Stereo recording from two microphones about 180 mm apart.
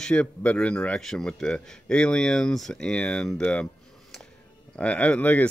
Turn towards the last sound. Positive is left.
turn(degrees=10)  # may be behind; listen again after turning